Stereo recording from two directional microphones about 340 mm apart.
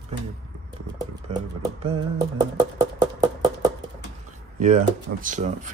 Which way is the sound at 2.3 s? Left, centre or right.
Centre.